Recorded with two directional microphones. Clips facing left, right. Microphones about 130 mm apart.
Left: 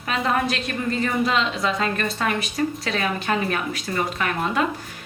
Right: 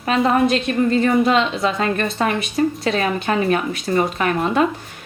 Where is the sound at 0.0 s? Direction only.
30° right (ahead or behind).